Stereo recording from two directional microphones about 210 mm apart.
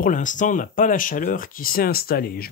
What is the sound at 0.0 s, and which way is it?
Speech, 35° left (ahead or behind).